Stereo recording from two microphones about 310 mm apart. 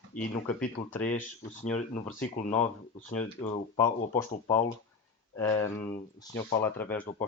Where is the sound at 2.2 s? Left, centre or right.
Left.